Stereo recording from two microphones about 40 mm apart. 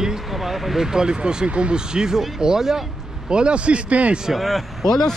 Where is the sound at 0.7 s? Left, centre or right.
Centre.